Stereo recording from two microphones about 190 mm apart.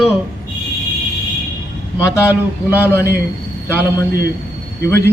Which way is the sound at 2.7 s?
15° left (ahead or behind).